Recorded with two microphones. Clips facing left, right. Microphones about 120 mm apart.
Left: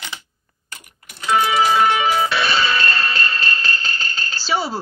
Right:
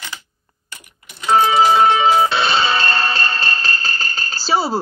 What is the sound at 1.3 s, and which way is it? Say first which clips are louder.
Music: right 3 dB; 35° right (ahead or behind).